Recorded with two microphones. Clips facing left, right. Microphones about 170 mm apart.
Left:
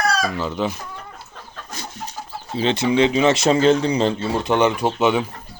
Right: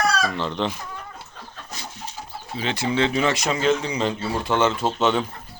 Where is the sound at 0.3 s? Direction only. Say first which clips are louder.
Left 2 dB; 5° left (ahead or behind).